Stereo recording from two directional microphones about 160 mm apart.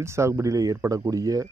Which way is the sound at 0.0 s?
15° right (ahead or behind).